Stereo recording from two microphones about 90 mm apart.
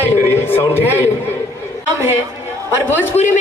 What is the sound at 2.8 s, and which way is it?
Speech, 25° left (ahead or behind).